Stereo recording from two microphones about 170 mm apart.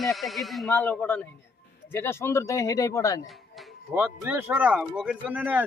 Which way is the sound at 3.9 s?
10° right (ahead or behind).